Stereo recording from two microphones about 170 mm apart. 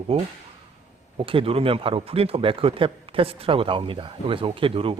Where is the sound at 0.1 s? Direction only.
35° right (ahead or behind).